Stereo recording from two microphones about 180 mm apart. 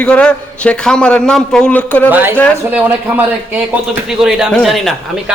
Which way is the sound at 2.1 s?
10° right (ahead or behind).